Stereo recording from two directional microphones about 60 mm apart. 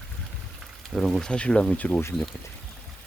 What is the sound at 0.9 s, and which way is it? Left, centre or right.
Speech, centre.